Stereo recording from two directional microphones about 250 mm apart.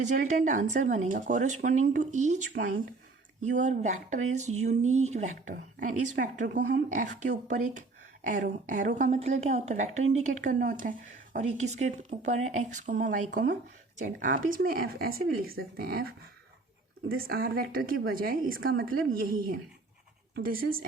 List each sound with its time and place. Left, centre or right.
0.0 s a woman's voice: right